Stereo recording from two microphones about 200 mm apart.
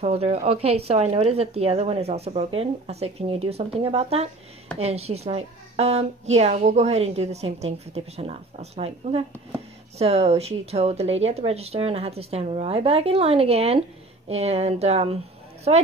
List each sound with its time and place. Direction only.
0.0 s a woman's voice: 30° right (ahead or behind)